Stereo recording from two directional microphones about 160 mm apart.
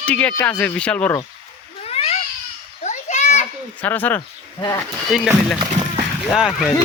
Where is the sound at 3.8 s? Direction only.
10° left (ahead or behind).